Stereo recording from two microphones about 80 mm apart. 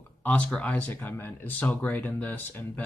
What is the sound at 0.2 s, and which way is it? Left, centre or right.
Speech, centre.